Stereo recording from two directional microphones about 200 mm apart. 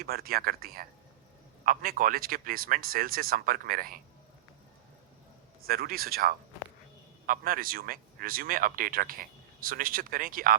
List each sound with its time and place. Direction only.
0.0 s speech: 50° right (ahead or behind)
5.6 s speech: 50° right (ahead or behind)